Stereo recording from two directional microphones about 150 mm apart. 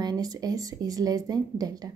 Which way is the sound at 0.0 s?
25° right (ahead or behind).